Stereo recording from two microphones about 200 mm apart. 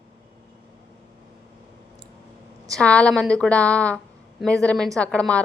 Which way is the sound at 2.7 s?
5° left (ahead or behind).